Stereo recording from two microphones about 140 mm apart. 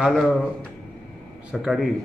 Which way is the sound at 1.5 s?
5° right (ahead or behind).